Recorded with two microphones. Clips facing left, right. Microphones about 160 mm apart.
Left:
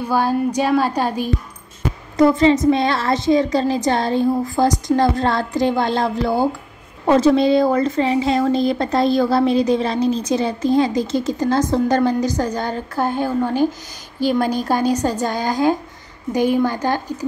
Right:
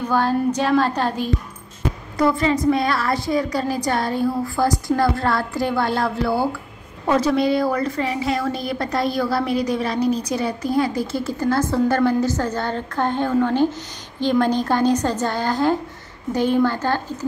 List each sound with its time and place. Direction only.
0.0 s a woman's voice: 10° left (ahead or behind)